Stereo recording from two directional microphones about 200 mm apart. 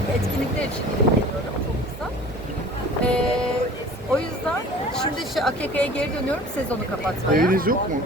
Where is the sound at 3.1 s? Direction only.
5° left (ahead or behind).